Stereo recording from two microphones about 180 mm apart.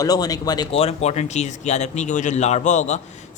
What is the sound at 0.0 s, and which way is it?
Speech, 20° left (ahead or behind).